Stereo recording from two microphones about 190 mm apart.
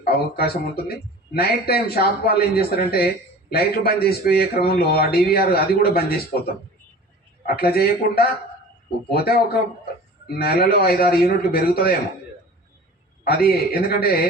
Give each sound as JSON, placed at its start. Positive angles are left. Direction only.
{"t": 0.0, "sound": "a man's voice", "side_deg": 55}
{"t": 13.2, "sound": "a man's voice", "side_deg": 55}